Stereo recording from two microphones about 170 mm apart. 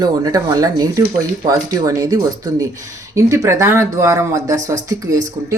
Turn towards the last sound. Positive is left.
turn(degrees=-20)  # may be behind; listen again after turning